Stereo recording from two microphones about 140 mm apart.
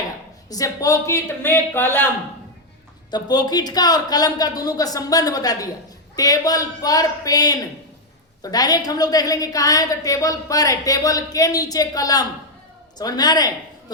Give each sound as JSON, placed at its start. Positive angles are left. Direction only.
{"t": 0.5, "sound": "a man's voice", "side_deg": 25}
{"t": 3.1, "sound": "a woman's voice", "side_deg": 30}